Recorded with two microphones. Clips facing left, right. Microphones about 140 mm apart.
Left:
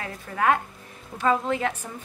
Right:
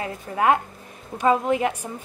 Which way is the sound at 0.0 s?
20° right (ahead or behind).